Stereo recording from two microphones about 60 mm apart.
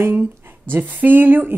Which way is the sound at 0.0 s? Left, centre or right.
Right.